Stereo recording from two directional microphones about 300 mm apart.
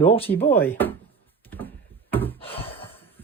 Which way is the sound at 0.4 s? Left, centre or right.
Centre.